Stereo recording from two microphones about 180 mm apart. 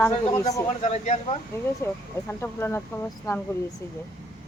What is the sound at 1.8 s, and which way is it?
Speech, 15° left (ahead or behind).